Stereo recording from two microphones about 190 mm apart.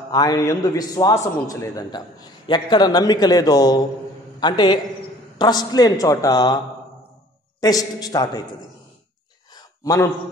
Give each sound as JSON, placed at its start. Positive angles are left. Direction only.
{"t": 0.1, "sound": "a man's voice", "side_deg": 20}
{"t": 7.6, "sound": "a man's voice", "side_deg": 20}
{"t": 9.5, "sound": "a sound", "side_deg": 20}